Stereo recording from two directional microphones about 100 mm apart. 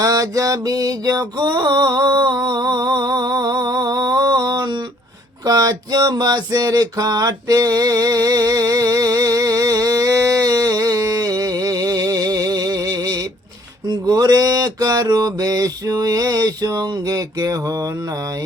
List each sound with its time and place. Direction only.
0.0 s mantra: 35° right (ahead or behind)
5.5 s a sound: 40° right (ahead or behind)
13.8 s mantra: 40° right (ahead or behind)